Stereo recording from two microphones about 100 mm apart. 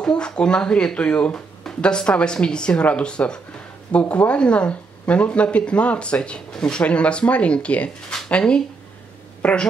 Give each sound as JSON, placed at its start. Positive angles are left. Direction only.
{"t": 0.0, "sound": "speech", "side_deg": 10}